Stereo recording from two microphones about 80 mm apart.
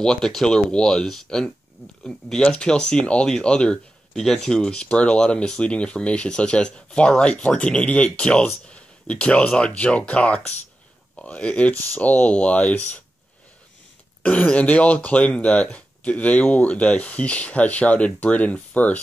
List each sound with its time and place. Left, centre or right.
0.0 s speech: centre
14.2 s speech: centre